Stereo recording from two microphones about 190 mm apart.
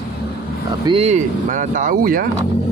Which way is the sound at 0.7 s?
25° right (ahead or behind).